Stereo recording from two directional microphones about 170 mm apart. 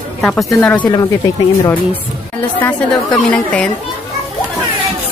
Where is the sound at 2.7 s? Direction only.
10° left (ahead or behind).